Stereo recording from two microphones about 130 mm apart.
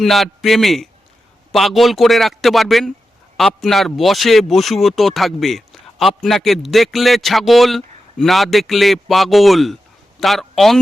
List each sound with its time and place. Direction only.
0.0 s a man's voice: centre (ahead or behind)